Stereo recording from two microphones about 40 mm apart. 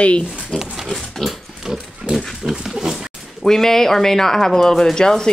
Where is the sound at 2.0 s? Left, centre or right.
Centre.